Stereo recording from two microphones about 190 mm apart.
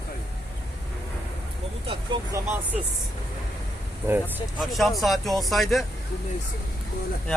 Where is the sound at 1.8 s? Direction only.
25° right (ahead or behind).